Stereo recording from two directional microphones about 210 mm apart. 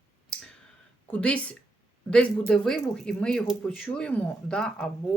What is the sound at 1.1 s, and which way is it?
Speech, 5° left (ahead or behind).